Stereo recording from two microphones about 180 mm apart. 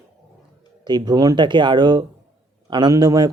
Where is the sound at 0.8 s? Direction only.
25° right (ahead or behind).